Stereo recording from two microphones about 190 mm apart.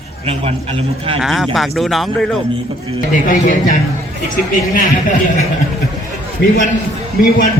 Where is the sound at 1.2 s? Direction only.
Centre (ahead or behind).